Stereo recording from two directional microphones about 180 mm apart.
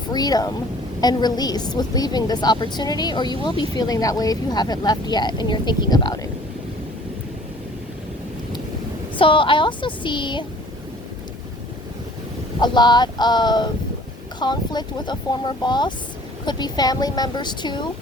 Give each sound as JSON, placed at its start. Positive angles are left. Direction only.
{"t": 0.1, "sound": "a woman's voice", "side_deg": 20}
{"t": 9.1, "sound": "a woman's voice", "side_deg": 30}
{"t": 12.5, "sound": "a woman's voice", "side_deg": 25}